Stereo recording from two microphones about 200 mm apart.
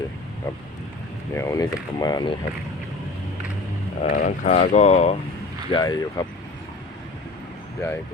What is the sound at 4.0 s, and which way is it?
Speech, 40° left (ahead or behind).